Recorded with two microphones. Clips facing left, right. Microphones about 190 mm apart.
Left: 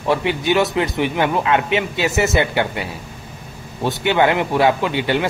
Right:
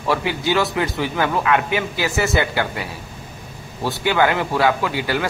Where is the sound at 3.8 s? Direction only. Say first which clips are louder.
Left 2 dB; 20° left (ahead or behind).